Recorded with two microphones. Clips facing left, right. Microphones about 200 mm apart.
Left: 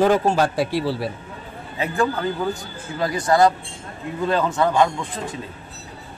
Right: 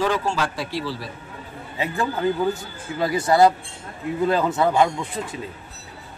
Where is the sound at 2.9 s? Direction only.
25° right (ahead or behind).